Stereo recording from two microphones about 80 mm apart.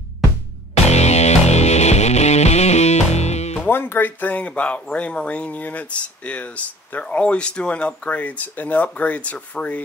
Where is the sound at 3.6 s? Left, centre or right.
Left.